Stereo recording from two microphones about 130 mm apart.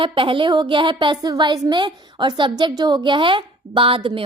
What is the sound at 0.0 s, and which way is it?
A woman's voice, 40° right (ahead or behind).